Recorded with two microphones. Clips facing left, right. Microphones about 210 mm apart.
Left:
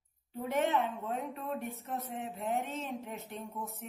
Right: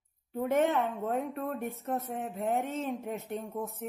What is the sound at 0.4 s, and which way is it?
Speech, 50° right (ahead or behind).